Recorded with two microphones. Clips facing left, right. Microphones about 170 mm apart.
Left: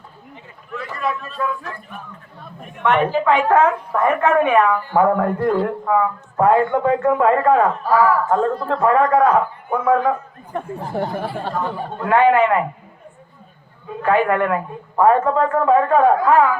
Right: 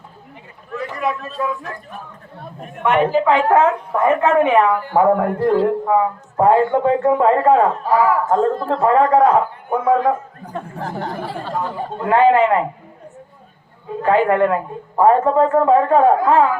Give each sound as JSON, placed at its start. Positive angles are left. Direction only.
{"t": 0.8, "sound": "a sound", "side_deg": -20}
{"t": 1.4, "sound": "a man's voice", "side_deg": -20}
{"t": 2.8, "sound": "a woman's voice", "side_deg": -10}
{"t": 4.0, "sound": "a man's voice", "side_deg": -25}
{"t": 10.8, "sound": "speech", "side_deg": -90}
{"t": 11.9, "sound": "a man's voice", "side_deg": -25}
{"t": 14.0, "sound": "a man's voice", "side_deg": -30}